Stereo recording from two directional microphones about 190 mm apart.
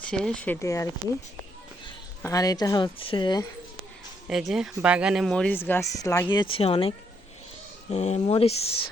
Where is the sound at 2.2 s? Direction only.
15° left (ahead or behind).